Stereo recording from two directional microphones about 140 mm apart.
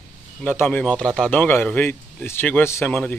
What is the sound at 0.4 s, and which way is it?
Speech, 10° left (ahead or behind).